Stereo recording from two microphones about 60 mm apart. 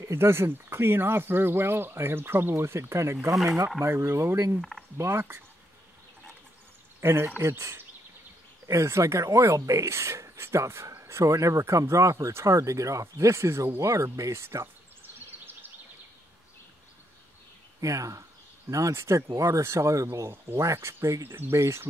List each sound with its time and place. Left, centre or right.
0.0 s speech: right
4.6 s speech: centre
4.9 s speech: right
7.0 s speech: right
15.1 s a sound: right
17.7 s speech: right